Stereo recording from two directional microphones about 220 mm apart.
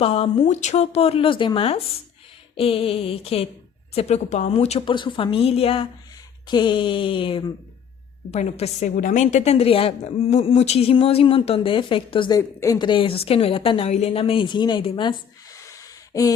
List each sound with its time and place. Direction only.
0.0 s a woman's voice: 25° left (ahead or behind)